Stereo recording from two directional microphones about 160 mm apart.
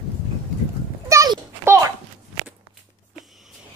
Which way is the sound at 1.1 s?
20° right (ahead or behind).